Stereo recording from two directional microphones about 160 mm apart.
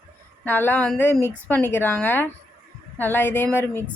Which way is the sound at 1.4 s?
10° left (ahead or behind).